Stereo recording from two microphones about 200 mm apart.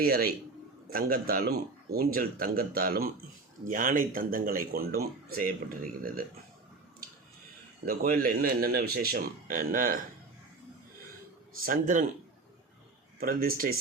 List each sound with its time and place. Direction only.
0.0 s speech: 50° right (ahead or behind)
7.9 s speech: 50° right (ahead or behind)
11.6 s speech: 45° right (ahead or behind)
13.1 s speech: 45° right (ahead or behind)